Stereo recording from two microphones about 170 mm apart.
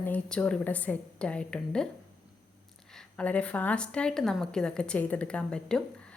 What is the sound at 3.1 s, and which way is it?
A woman's voice, 10° left (ahead or behind).